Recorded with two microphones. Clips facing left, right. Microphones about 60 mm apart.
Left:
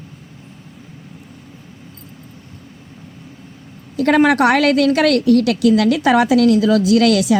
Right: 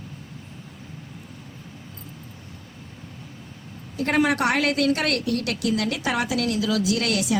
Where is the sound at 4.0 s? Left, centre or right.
Left.